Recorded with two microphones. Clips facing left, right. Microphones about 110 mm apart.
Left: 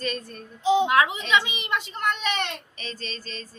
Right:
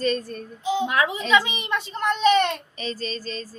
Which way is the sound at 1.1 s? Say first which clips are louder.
Right 3 dB; 35° right (ahead or behind).